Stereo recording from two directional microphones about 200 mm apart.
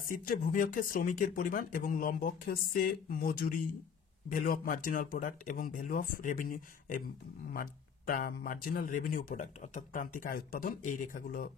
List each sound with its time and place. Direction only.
0.1 s speech: 45° left (ahead or behind)